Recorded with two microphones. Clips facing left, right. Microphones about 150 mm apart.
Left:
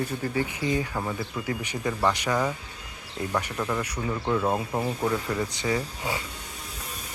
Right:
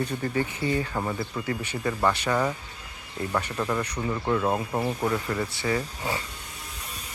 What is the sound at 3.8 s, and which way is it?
Speech, 10° left (ahead or behind).